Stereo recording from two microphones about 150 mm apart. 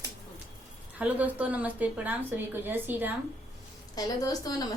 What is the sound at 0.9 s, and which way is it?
A woman's voice, 10° right (ahead or behind).